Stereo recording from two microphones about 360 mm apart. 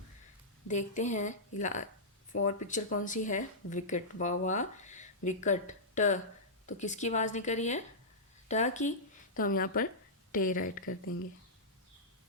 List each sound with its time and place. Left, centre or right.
0.7 s speech: centre